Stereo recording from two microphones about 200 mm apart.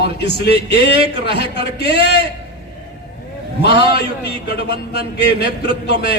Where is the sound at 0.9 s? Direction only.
25° right (ahead or behind).